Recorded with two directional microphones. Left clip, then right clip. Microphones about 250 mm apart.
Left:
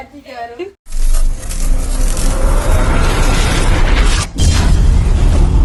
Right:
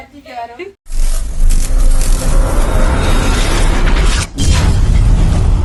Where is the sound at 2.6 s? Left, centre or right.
Centre.